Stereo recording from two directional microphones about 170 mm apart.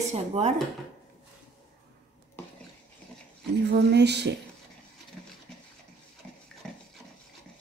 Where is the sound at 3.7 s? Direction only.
75° right (ahead or behind).